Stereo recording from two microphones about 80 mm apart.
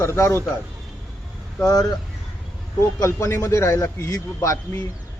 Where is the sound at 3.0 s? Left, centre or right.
Left.